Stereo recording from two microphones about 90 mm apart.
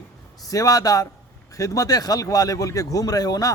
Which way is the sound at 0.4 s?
40° left (ahead or behind).